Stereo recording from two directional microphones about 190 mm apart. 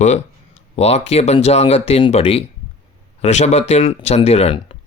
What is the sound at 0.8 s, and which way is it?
Speech, 35° left (ahead or behind).